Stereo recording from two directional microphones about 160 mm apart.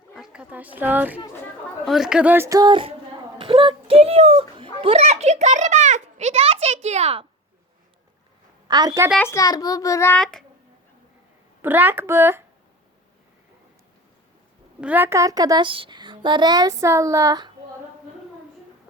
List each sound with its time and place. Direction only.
0.1 s speech: 5° right (ahead or behind)
1.8 s speech: centre (ahead or behind); by 2.9 s 30° right (ahead or behind)
3.3 s a sound: 35° right (ahead or behind)
8.6 s a woman's voice: 25° right (ahead or behind)
9.1 s a child's voice: 20° left (ahead or behind)
11.6 s speech: 10° right (ahead or behind)
14.8 s a child's voice: 10° right (ahead or behind)